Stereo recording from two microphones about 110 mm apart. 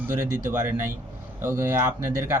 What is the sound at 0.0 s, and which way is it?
Speech, 20° right (ahead or behind).